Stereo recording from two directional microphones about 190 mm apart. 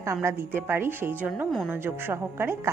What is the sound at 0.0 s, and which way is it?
A woman's voice, 15° right (ahead or behind).